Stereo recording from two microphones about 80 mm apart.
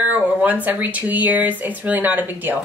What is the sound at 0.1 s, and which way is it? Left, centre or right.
A woman's voice, centre.